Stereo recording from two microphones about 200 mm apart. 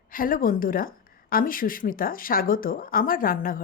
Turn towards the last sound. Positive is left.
turn(degrees=45)  # may be behind; listen again after turning